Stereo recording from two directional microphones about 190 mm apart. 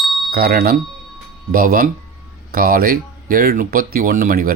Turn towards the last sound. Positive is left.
turn(degrees=-50)  # may be behind; listen again after turning